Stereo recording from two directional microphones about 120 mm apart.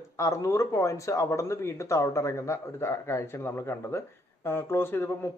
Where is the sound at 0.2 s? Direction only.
25° left (ahead or behind).